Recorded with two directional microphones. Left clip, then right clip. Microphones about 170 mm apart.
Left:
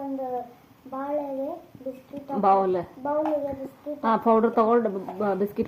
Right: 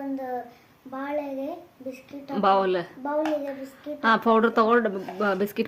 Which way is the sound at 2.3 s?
30° right (ahead or behind).